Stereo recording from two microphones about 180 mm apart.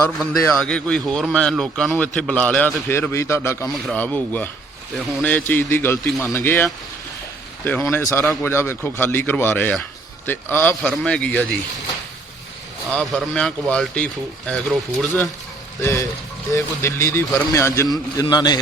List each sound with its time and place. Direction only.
0.5 s a man's voice: 5° left (ahead or behind)
12.9 s a man's voice: 5° left (ahead or behind); by 18.6 s 20° left (ahead or behind)